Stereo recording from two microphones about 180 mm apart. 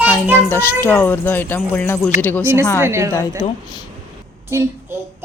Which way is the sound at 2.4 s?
15° right (ahead or behind).